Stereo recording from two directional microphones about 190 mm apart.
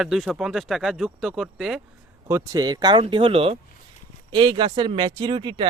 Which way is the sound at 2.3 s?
20° right (ahead or behind).